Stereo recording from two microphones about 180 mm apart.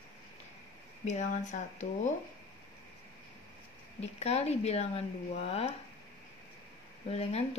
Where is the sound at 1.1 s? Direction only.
45° left (ahead or behind).